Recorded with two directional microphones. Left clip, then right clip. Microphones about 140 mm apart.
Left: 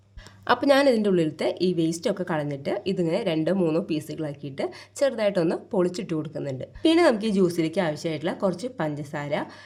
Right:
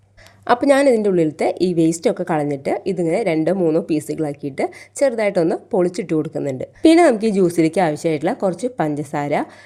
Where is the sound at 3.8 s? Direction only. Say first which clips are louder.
Right 9 dB; 35° right (ahead or behind).